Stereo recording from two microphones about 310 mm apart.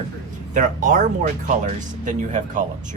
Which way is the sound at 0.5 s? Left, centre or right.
Right.